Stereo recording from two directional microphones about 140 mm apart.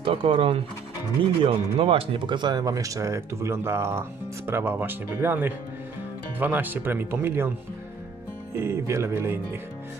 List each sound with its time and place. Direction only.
0.0 s speech: 40° right (ahead or behind); by 7.5 s 15° right (ahead or behind)
8.5 s speech: 20° right (ahead or behind)